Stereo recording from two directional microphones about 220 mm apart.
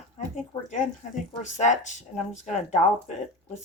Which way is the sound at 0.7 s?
35° left (ahead or behind).